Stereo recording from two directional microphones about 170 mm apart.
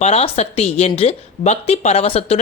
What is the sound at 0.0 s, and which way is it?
Speech, 40° left (ahead or behind).